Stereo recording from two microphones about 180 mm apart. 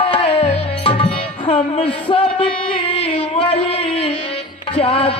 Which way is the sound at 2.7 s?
30° left (ahead or behind).